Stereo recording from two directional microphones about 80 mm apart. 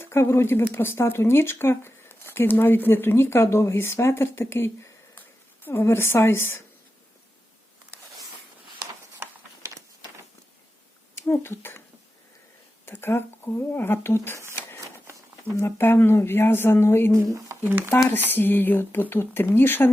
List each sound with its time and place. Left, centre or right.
0.0 s speech: left
9.6 s a sound: right
11.2 s speech: left
12.8 s speech: left
15.5 s speech: left
17.7 s speech: right
17.9 s speech: left